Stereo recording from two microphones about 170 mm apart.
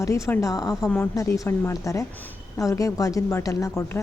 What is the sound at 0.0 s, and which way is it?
A woman's voice, 20° left (ahead or behind).